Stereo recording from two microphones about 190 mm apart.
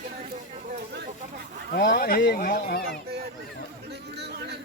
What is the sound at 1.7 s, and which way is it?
Speech, 50° left (ahead or behind).